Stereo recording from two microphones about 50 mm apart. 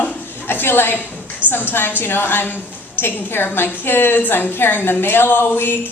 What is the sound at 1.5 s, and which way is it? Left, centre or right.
A woman's voice, left.